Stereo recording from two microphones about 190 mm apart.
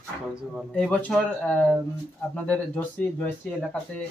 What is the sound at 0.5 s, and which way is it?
Speech, 5° left (ahead or behind).